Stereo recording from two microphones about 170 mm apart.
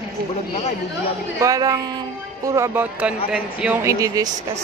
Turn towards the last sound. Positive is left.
turn(degrees=-20)  # may be behind; listen again after turning